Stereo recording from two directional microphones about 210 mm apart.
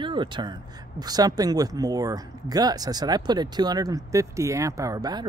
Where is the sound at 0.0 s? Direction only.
25° right (ahead or behind).